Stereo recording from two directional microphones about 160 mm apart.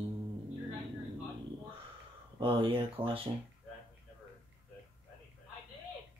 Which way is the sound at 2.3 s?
35° right (ahead or behind).